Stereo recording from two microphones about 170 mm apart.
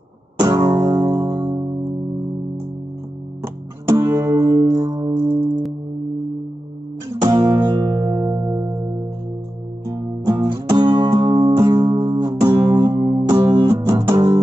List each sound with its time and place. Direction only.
0.4 s music: 20° right (ahead or behind)
3.4 s music: 15° right (ahead or behind)
7.2 s music: 25° right (ahead or behind)
9.8 s music: 20° right (ahead or behind)